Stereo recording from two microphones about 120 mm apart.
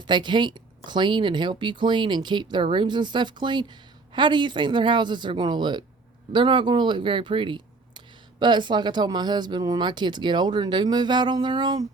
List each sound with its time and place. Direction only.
0.0 s speech: 40° right (ahead or behind)